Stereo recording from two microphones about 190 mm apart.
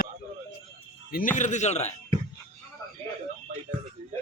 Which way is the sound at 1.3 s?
40° left (ahead or behind).